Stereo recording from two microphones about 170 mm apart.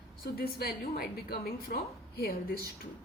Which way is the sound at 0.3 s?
65° left (ahead or behind).